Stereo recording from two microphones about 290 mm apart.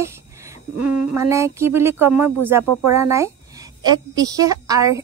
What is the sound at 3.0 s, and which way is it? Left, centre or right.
Speech, centre.